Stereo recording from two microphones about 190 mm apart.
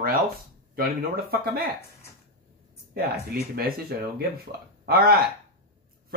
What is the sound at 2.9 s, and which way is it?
Speech, 55° right (ahead or behind).